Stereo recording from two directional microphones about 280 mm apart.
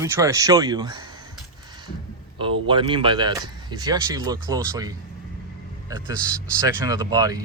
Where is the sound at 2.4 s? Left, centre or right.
Centre.